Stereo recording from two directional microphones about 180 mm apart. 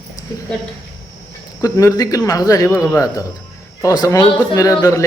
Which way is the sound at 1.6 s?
20° left (ahead or behind).